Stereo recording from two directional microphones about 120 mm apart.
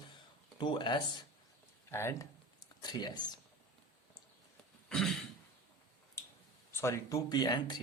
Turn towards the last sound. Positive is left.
turn(degrees=35)  # may be behind; listen again after turning